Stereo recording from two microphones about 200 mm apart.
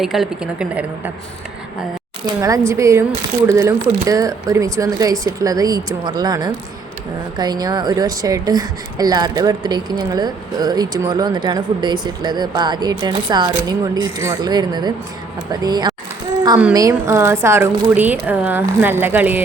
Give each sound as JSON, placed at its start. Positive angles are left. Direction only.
{"t": 0.0, "sound": "a woman's voice", "side_deg": 0}
{"t": 2.2, "sound": "a woman's voice", "side_deg": -15}